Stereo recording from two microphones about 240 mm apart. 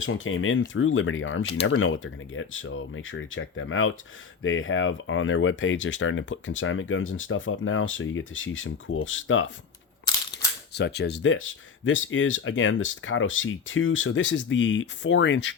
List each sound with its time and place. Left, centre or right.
0.0 s speech: left
10.8 s speech: left